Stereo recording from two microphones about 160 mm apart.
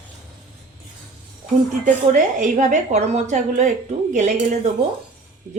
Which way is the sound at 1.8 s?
50° right (ahead or behind).